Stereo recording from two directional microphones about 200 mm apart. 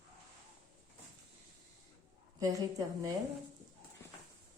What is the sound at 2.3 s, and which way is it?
Speech, 15° right (ahead or behind).